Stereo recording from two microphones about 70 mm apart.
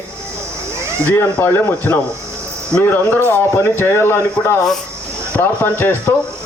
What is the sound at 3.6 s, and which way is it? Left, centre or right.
A man's voice, left.